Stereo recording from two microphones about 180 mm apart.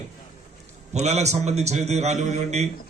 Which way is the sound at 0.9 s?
40° right (ahead or behind).